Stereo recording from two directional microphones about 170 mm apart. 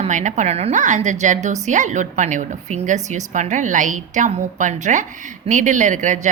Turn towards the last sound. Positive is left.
turn(degrees=-45)  # may be behind; listen again after turning